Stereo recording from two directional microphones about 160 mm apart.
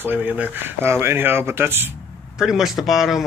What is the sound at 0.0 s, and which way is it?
Speech, 10° right (ahead or behind).